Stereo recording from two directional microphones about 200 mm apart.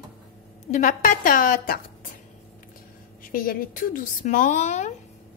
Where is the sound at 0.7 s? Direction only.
40° left (ahead or behind).